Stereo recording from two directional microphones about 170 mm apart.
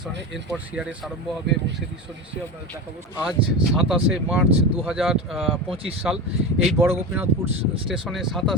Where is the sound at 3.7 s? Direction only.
Centre (ahead or behind).